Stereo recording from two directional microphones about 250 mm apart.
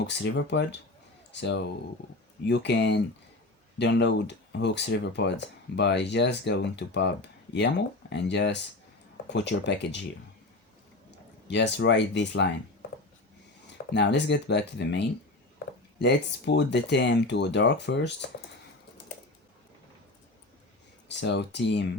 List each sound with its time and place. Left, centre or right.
0.2 s speech: left
11.4 s speech: left
13.7 s speech: left
21.1 s speech: left